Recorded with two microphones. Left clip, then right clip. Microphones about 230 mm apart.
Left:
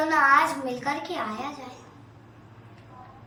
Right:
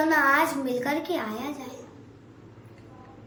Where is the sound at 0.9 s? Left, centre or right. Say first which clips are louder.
Right 1 dB; centre.